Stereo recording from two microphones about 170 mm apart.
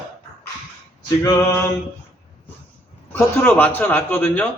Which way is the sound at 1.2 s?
20° left (ahead or behind).